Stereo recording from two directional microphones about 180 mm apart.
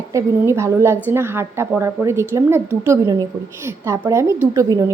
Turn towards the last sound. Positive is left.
turn(degrees=-20)  # may be behind; listen again after turning